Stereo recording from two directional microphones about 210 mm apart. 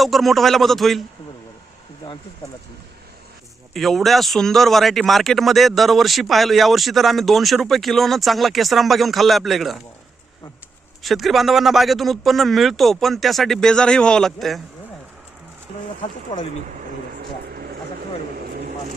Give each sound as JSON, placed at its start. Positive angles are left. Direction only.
{"t": 0.0, "sound": "speech", "side_deg": 0}
{"t": 3.8, "sound": "speech", "side_deg": 0}
{"t": 11.0, "sound": "speech", "side_deg": 0}
{"t": 16.3, "sound": "speech", "side_deg": 20}
{"t": 17.5, "sound": "vehicle", "side_deg": -45}